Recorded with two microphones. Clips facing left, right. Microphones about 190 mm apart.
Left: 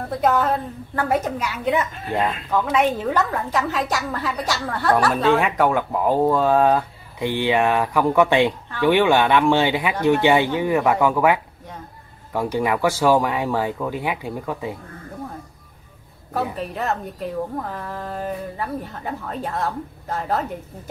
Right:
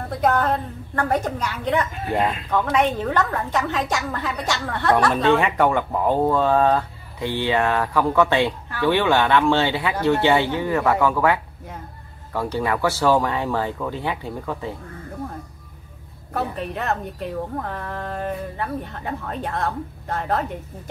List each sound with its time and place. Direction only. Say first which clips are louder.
0.2 s a woman's voice: even; 5° left (ahead or behind)
16.5 s a woman's voice: even; centre (ahead or behind)